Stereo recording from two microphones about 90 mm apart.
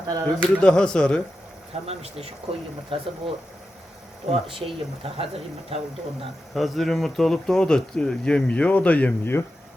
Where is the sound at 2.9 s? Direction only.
80° right.